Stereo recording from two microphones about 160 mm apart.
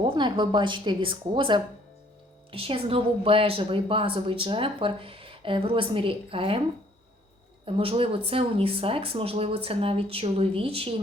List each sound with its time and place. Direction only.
0.0 s a woman's voice: 30° right (ahead or behind)
7.6 s a woman's voice: 35° right (ahead or behind)